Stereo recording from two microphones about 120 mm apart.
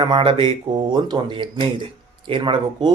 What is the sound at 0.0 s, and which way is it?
Speech, 45° right (ahead or behind).